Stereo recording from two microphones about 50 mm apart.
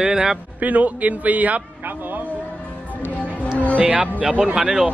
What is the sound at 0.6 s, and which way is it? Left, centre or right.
A man's voice, right.